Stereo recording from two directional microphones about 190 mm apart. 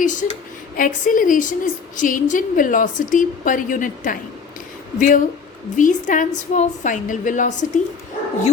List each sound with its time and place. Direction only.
0.0 s a woman's voice: 40° left (ahead or behind)